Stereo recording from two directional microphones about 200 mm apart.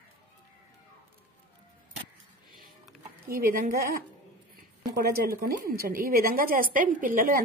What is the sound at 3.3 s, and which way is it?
A woman's voice, 45° right (ahead or behind).